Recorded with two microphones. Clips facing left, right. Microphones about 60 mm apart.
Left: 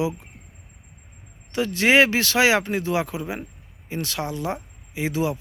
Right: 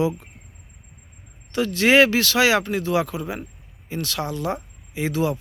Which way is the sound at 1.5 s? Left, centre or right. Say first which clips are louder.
Right 1 dB; centre.